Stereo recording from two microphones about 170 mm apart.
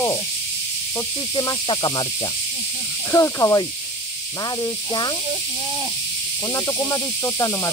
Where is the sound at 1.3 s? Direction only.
25° left (ahead or behind).